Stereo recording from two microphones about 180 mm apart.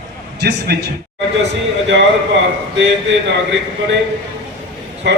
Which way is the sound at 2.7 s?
85° right.